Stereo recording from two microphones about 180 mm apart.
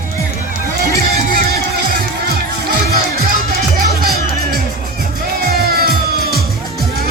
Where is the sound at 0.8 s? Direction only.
60° right (ahead or behind).